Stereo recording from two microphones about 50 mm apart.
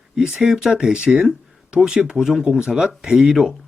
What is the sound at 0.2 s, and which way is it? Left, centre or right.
Speech, centre.